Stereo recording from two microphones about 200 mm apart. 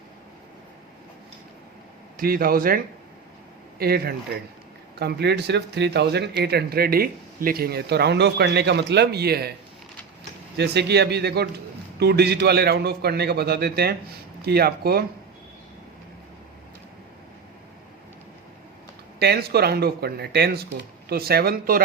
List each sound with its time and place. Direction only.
2.1 s a man's voice: 50° right (ahead or behind)
10.6 s a man's voice: 55° right (ahead or behind)
19.2 s a man's voice: 55° right (ahead or behind)